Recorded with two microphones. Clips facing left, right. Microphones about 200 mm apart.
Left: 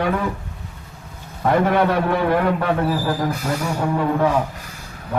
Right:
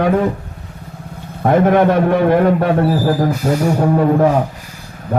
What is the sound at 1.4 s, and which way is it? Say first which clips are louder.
A man's voice: right 5 dB; 45° right (ahead or behind).